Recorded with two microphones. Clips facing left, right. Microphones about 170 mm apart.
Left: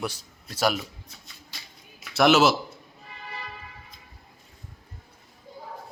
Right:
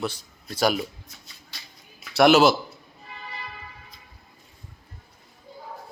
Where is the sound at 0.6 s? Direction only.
Centre (ahead or behind).